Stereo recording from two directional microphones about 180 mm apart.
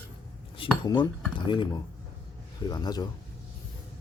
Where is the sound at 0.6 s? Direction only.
25° left (ahead or behind).